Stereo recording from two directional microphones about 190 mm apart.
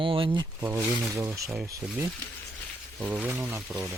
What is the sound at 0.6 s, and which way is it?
Speech, 15° right (ahead or behind).